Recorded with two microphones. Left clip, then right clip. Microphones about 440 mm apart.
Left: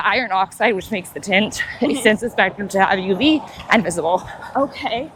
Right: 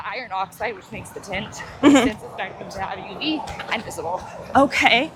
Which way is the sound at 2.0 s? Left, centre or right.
Left.